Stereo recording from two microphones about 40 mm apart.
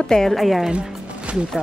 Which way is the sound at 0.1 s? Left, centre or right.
Centre.